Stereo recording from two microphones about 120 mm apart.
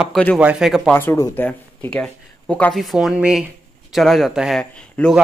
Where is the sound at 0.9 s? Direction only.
15° left (ahead or behind); by 4.6 s centre (ahead or behind).